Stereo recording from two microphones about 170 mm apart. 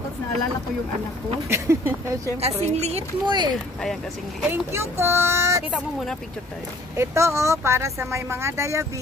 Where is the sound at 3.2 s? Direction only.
25° right (ahead or behind).